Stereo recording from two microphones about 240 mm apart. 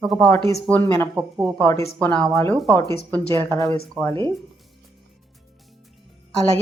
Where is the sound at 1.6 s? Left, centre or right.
Centre.